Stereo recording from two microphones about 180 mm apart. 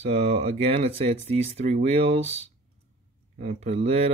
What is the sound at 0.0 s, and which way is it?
Speech, 35° right (ahead or behind).